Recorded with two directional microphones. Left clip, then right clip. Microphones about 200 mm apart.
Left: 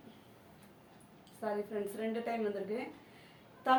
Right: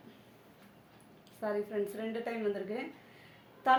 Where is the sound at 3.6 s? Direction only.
30° right (ahead or behind).